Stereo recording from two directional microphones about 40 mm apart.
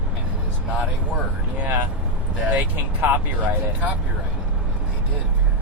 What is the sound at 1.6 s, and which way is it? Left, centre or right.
Speech, right.